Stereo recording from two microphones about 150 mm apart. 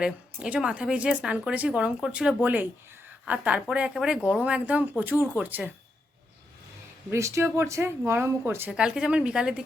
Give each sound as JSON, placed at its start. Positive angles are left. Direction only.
{"t": 0.0, "sound": "speech", "side_deg": -5}
{"t": 7.1, "sound": "speech", "side_deg": -20}